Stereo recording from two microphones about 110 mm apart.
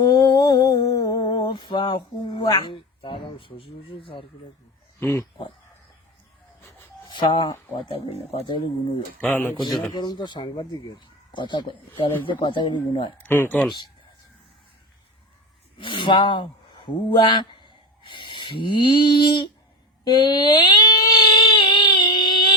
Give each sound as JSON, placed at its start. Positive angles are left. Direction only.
{"t": 0.0, "sound": "humming", "side_deg": 40}
{"t": 1.2, "sound": "a sound", "side_deg": 45}
{"t": 2.4, "sound": "speech", "side_deg": 40}
{"t": 4.9, "sound": "speech", "side_deg": 20}
{"t": 7.1, "sound": "speech", "side_deg": 45}
{"t": 7.9, "sound": "speech", "side_deg": 65}
{"t": 9.2, "sound": "speech", "side_deg": 15}
{"t": 9.9, "sound": "speech", "side_deg": 40}
{"t": 13.1, "sound": "speech", "side_deg": 15}
{"t": 15.8, "sound": "speech", "side_deg": 45}
{"t": 20.1, "sound": "a sound", "side_deg": 40}